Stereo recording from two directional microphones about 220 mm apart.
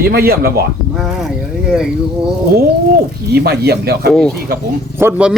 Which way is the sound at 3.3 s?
45° right (ahead or behind).